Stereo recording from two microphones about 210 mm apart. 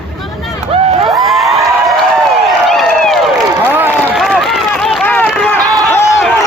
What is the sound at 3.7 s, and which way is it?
Run, 10° right (ahead or behind).